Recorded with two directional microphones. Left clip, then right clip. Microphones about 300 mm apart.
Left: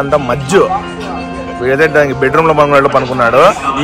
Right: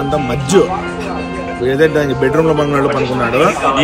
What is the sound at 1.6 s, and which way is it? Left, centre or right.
Speech, left.